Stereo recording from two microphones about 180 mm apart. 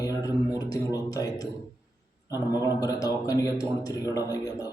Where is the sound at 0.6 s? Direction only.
20° left (ahead or behind).